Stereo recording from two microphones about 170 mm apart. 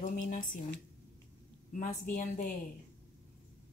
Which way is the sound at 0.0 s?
50° left (ahead or behind).